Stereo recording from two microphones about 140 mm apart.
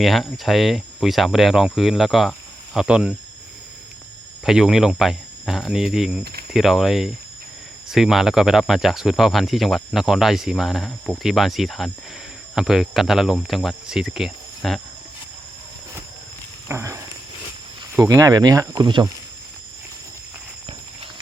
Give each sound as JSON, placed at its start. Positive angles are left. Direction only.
{"t": 0.0, "sound": "speech", "side_deg": 0}
{"t": 4.4, "sound": "speech", "side_deg": -5}
{"t": 16.6, "sound": "speech", "side_deg": -20}